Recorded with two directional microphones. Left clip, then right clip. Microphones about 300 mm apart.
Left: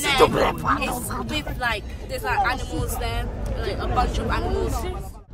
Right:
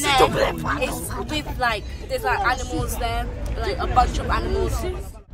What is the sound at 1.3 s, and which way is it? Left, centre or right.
Speech, centre.